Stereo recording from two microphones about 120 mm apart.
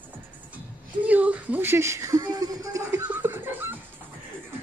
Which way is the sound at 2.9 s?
15° right (ahead or behind).